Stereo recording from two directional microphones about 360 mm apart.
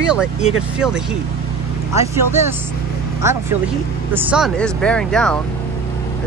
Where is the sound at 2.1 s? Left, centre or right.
Centre.